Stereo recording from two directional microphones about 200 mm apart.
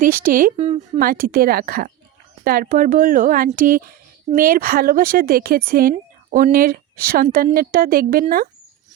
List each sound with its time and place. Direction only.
0.0 s a woman's voice: 45° right (ahead or behind)
0.5 s a woman's voice: 30° right (ahead or behind)
0.9 s a woman's voice: 45° right (ahead or behind)